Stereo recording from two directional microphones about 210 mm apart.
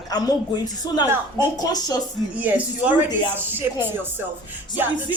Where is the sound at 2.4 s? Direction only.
5° right (ahead or behind).